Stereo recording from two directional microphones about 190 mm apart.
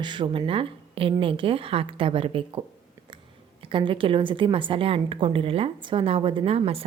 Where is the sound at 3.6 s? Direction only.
25° right (ahead or behind).